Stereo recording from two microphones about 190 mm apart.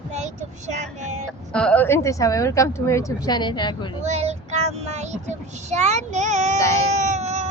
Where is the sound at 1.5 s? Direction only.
5° left (ahead or behind); by 3.9 s 25° left (ahead or behind).